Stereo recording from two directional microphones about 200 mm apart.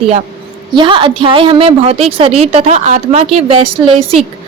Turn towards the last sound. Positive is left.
turn(degrees=-30)  # may be behind; listen again after turning